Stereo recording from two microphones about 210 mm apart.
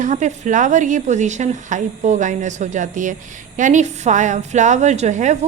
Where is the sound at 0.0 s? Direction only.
35° right (ahead or behind).